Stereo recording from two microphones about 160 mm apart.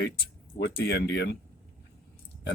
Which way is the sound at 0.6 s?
90° left.